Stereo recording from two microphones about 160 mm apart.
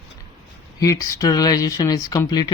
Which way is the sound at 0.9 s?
20° left (ahead or behind).